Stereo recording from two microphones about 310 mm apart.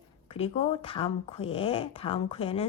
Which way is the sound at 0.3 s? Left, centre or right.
Centre.